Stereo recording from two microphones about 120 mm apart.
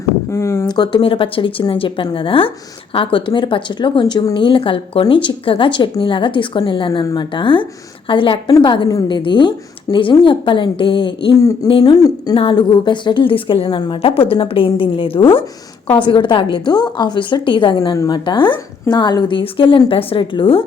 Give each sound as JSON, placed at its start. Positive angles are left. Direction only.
{"t": 0.3, "sound": "speech", "side_deg": 25}
{"t": 0.7, "sound": "speech", "side_deg": 35}
{"t": 1.0, "sound": "speech", "side_deg": 45}
{"t": 11.3, "sound": "speech", "side_deg": 25}
{"t": 12.3, "sound": "speech", "side_deg": 50}
{"t": 17.7, "sound": "speech", "side_deg": 30}